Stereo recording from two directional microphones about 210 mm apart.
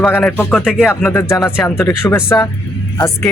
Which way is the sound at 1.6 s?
10° left (ahead or behind).